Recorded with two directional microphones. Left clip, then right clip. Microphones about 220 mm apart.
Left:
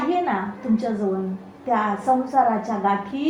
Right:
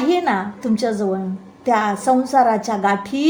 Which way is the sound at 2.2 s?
50° right (ahead or behind).